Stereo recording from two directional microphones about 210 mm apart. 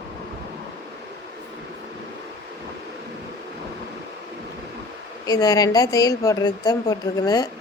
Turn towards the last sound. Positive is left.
turn(degrees=20)  # may be behind; listen again after turning